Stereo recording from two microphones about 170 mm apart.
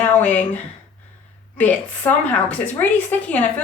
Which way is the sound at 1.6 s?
10° left (ahead or behind).